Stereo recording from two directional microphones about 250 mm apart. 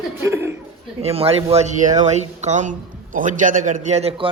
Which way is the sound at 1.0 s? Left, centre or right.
Right.